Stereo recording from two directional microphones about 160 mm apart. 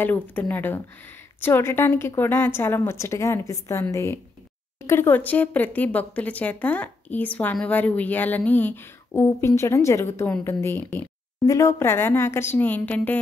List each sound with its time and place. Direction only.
0.0 s speech: 10° left (ahead or behind)